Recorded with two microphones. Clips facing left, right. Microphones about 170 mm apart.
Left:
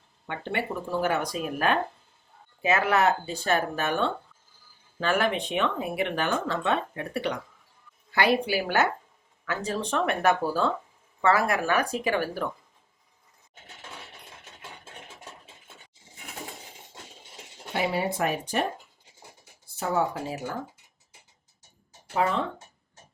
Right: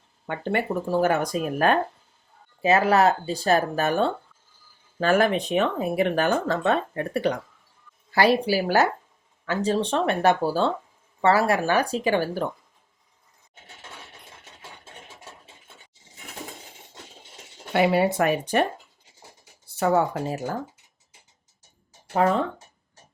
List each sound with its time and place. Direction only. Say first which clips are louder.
0.3 s speech: right 5 dB; 45° right (ahead or behind); by 12.5 s 30° right (ahead or behind)
17.7 s speech: right 7 dB; 70° right (ahead or behind)
19.7 s speech: right 5 dB; 65° right (ahead or behind); by 20.6 s 45° right (ahead or behind)
22.1 s speech: right 5 dB; 40° right (ahead or behind)